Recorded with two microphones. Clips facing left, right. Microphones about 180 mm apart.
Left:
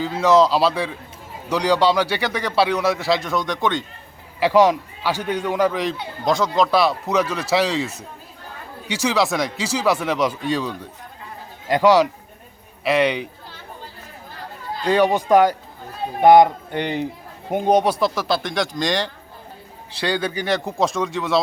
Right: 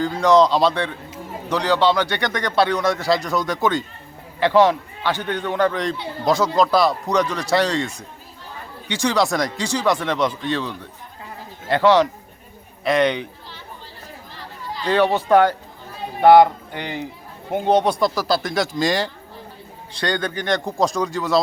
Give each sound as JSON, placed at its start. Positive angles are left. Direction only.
{"t": 0.0, "sound": "a man's voice", "side_deg": 5}
{"t": 4.4, "sound": "a man's voice", "side_deg": 10}
{"t": 14.8, "sound": "a man's voice", "side_deg": 10}
{"t": 19.9, "sound": "a man's voice", "side_deg": 5}